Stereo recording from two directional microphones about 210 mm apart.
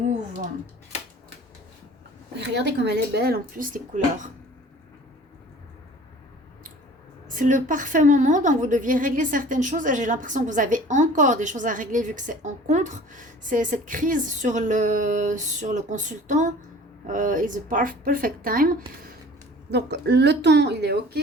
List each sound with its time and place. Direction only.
0.1 s speech: 40° right (ahead or behind)
2.4 s speech: 55° right (ahead or behind); by 4.3 s 40° right (ahead or behind)
7.3 s a woman's voice: 40° right (ahead or behind)
19.7 s speech: 55° right (ahead or behind)